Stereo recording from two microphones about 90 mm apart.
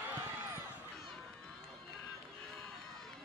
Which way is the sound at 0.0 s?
20° right (ahead or behind).